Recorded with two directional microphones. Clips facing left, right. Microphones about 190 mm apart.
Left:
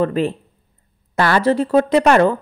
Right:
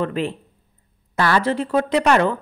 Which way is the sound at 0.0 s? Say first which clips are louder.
Left 5 dB; 40° left (ahead or behind).